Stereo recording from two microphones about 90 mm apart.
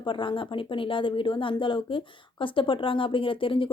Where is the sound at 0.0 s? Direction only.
70° left (ahead or behind).